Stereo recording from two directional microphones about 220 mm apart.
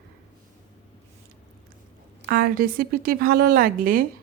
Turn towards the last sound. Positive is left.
turn(degrees=-40)  # may be behind; listen again after turning